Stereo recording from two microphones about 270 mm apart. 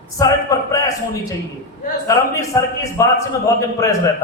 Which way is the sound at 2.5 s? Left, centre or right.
Centre.